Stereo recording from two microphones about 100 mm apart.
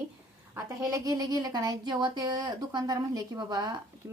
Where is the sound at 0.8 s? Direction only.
35° right (ahead or behind).